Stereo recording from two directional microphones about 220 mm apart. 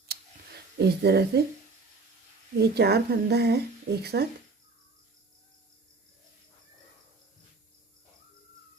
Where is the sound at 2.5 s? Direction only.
45° right (ahead or behind).